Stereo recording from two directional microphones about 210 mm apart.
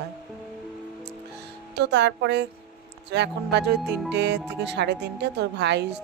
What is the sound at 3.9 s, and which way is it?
Music, 5° right (ahead or behind).